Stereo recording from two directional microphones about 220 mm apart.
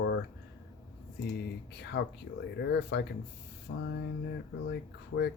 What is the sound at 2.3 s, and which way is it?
Speech, 50° left (ahead or behind).